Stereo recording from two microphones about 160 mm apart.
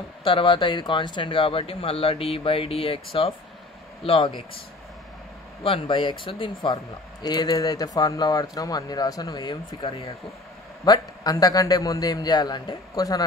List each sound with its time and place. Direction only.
0.2 s speech: 30° left (ahead or behind)
5.6 s speech: 35° left (ahead or behind)
10.9 s speech: 25° left (ahead or behind)